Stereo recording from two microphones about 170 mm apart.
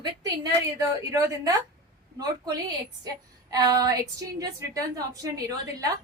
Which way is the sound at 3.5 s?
20° right (ahead or behind).